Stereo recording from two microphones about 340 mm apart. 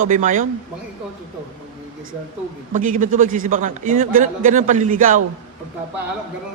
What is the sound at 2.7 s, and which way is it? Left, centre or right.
A man's voice, right.